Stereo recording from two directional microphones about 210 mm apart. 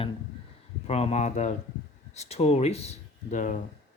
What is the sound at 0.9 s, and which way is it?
Speech, 30° left (ahead or behind).